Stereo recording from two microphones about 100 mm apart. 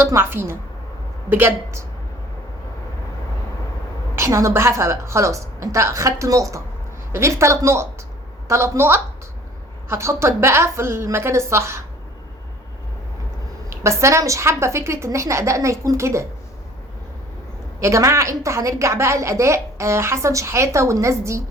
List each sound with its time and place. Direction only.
0.0 s a woman's voice: 20° right (ahead or behind)
4.1 s a woman's voice: 30° right (ahead or behind)
13.8 s a woman's voice: 30° right (ahead or behind)
17.7 s a woman's voice: 30° right (ahead or behind)